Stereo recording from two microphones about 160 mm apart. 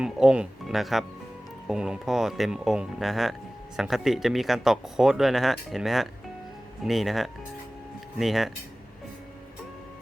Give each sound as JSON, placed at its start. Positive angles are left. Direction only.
{"t": 0.0, "sound": "speech", "side_deg": -5}